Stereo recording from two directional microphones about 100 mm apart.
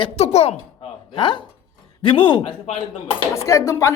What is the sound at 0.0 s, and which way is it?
Speech, 90° left.